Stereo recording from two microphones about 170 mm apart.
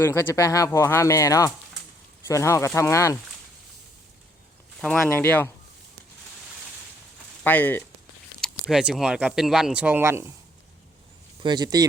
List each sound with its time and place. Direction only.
0.0 s speech: 15° left (ahead or behind)
5.0 s speech: 10° left (ahead or behind)
7.4 s speech: 10° left (ahead or behind); by 10.3 s 15° right (ahead or behind)
11.4 s speech: 25° right (ahead or behind)